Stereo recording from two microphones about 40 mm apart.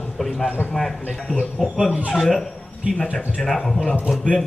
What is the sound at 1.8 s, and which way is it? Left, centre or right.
Speech, right.